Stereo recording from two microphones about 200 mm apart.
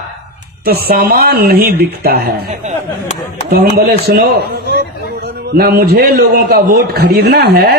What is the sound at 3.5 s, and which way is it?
A man's voice, 50° right (ahead or behind).